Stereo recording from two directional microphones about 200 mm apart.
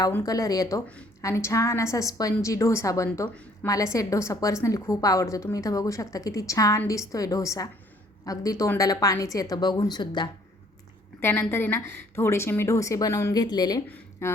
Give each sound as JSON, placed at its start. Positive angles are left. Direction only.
{"t": 0.0, "sound": "a woman's voice", "side_deg": 15}
{"t": 11.2, "sound": "a woman's voice", "side_deg": 10}